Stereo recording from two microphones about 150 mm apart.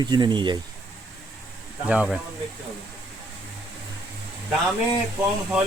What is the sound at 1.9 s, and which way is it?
Speech, 5° right (ahead or behind).